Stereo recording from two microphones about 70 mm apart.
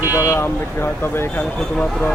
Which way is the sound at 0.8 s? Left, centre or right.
Left.